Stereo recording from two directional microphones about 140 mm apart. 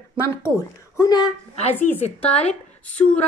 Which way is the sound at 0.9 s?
30° left (ahead or behind).